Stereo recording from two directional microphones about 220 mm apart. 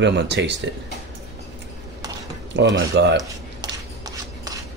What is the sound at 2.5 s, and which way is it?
Speech, 50° right (ahead or behind).